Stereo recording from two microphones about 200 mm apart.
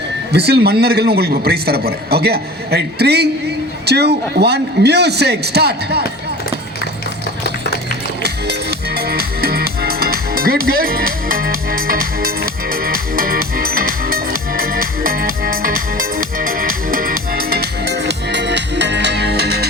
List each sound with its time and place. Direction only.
0.3 s a man's voice: 55° right (ahead or behind)
9.0 s music: 50° right (ahead or behind)